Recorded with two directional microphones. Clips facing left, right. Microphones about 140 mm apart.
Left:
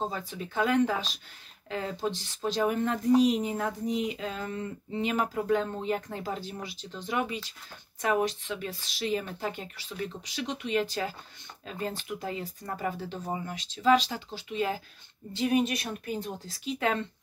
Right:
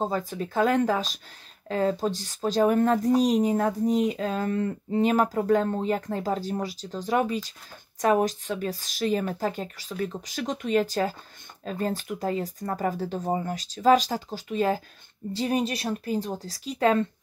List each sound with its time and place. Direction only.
0.0 s a woman's voice: 45° right (ahead or behind)